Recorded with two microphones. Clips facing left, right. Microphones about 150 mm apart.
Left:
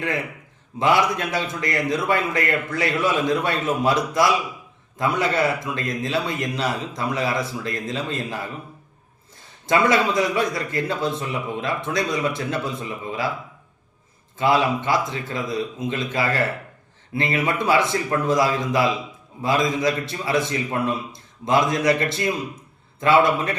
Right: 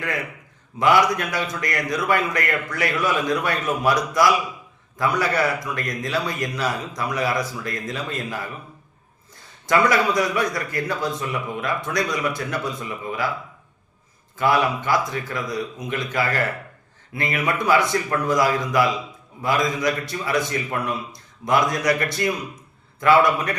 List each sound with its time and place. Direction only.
0.8 s a man's voice: 25° left (ahead or behind)
9.6 s a man's voice: 25° left (ahead or behind)
14.3 s a man's voice: 25° left (ahead or behind)